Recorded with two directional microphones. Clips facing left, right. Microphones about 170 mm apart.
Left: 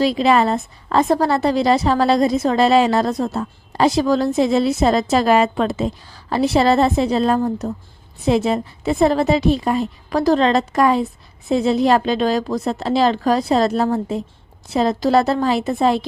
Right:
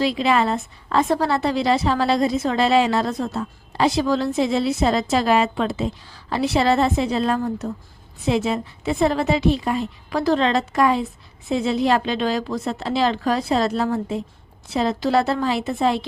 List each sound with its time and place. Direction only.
0.0 s a woman's voice: 40° left (ahead or behind)